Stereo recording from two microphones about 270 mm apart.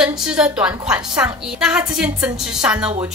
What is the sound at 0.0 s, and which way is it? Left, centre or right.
A woman's voice, centre.